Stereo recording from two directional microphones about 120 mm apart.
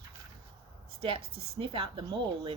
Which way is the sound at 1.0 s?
50° right (ahead or behind).